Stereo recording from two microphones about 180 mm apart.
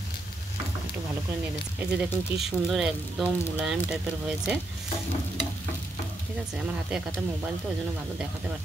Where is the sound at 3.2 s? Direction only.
10° left (ahead or behind).